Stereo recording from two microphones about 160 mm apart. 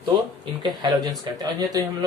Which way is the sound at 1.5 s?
25° right (ahead or behind).